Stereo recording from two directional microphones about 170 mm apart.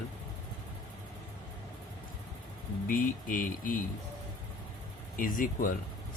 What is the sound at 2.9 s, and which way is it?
Speech, 55° left (ahead or behind).